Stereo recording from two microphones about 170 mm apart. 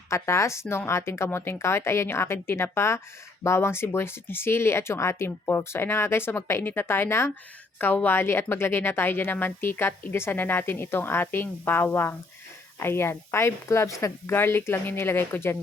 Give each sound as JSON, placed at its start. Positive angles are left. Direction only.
{"t": 0.1, "sound": "speech", "side_deg": 15}